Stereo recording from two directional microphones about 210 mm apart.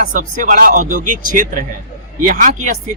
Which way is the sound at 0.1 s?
35° right (ahead or behind).